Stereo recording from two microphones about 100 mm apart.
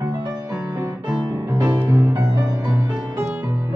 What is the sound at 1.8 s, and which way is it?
Music, 20° right (ahead or behind).